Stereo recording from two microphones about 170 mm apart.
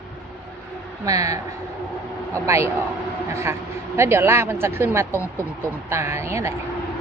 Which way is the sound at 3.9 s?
15° right (ahead or behind).